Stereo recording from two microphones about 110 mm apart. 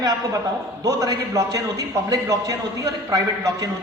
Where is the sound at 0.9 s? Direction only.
35° right (ahead or behind).